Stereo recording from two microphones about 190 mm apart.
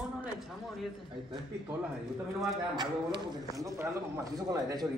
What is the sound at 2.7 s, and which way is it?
A man's voice, 20° right (ahead or behind).